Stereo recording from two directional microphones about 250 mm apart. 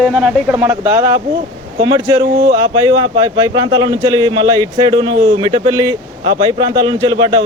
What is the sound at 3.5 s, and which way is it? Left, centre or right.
A man's voice, centre.